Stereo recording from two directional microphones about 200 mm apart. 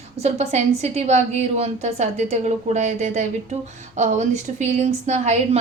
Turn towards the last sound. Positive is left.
turn(degrees=-35)  # may be behind; listen again after turning